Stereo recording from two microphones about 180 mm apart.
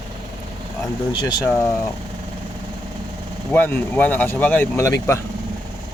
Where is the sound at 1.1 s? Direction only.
25° left (ahead or behind).